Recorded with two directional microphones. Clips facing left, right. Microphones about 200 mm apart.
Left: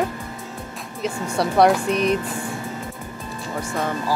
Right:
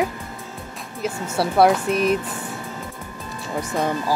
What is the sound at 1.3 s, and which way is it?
Speech, 5° right (ahead or behind).